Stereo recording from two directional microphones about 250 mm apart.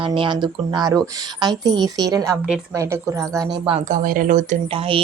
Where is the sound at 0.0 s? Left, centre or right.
Right.